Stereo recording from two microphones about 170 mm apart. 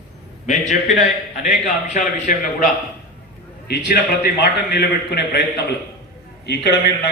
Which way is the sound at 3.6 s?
65° left (ahead or behind).